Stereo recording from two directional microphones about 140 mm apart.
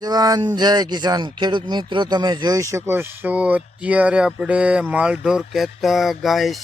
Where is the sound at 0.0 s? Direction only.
30° right (ahead or behind).